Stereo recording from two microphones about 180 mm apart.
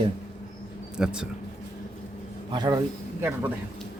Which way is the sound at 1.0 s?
5° right (ahead or behind).